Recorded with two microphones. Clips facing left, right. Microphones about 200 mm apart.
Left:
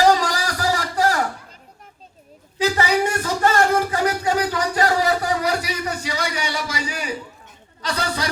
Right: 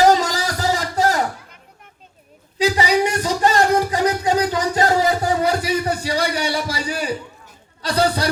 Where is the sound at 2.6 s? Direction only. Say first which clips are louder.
Right 2 dB; 15° right (ahead or behind).